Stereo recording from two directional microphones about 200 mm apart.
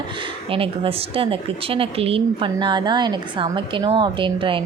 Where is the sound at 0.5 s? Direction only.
30° right (ahead or behind).